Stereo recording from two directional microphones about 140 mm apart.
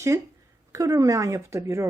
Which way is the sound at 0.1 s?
20° right (ahead or behind).